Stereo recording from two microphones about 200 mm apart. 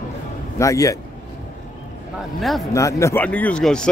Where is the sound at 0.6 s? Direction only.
15° left (ahead or behind).